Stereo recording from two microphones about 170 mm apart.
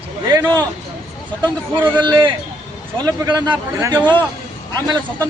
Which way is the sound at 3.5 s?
15° right (ahead or behind).